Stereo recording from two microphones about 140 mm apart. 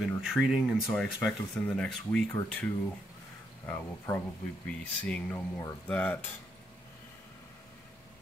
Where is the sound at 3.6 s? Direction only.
20° left (ahead or behind).